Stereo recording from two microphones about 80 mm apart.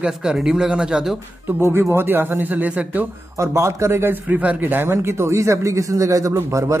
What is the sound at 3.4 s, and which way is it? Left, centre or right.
Speech, right.